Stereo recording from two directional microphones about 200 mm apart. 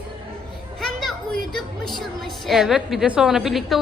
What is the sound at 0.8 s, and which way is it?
Children playing, centre (ahead or behind).